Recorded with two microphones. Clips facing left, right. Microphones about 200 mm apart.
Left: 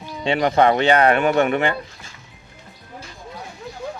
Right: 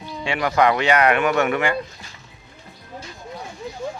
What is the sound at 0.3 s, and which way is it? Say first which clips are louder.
Speech: left 3 dB; 30° left (ahead or behind).